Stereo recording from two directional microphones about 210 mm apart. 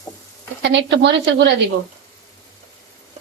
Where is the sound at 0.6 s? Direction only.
55° right (ahead or behind).